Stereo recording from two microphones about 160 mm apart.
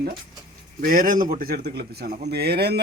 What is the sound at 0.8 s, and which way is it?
Speech, 60° right (ahead or behind).